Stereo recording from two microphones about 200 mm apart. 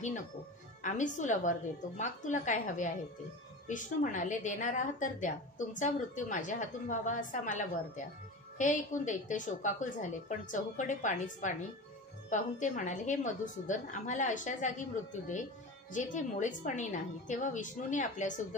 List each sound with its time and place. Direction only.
0.8 s a woman's voice: 40° left (ahead or behind)